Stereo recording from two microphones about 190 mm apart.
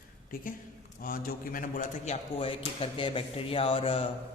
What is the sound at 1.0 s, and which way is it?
A man's voice, 45° left (ahead or behind).